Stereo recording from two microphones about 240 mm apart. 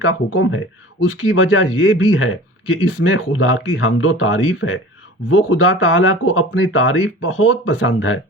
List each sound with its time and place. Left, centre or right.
0.0 s a man's voice: left